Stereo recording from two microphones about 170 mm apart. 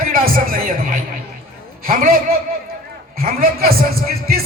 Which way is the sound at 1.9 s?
60° right (ahead or behind).